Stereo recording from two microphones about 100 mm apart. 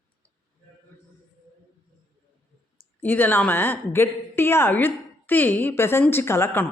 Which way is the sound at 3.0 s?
20° left (ahead or behind).